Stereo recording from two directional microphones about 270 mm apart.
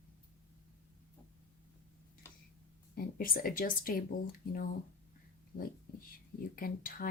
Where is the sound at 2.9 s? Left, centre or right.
Left.